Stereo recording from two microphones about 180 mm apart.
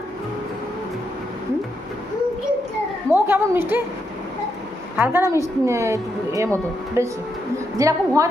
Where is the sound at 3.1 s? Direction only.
10° right (ahead or behind).